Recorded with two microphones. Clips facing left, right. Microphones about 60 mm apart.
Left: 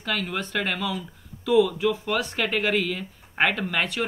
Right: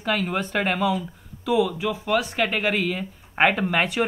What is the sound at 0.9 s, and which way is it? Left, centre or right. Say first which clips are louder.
Speech: right 4 dB; centre.